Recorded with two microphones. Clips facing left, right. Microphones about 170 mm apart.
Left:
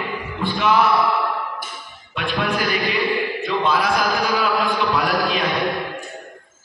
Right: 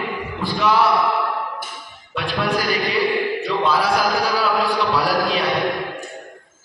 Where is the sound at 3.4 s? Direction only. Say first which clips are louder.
Left 1 dB; 35° right (ahead or behind).